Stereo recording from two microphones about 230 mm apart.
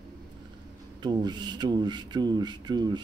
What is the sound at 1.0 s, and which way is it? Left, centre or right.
A man's voice, centre.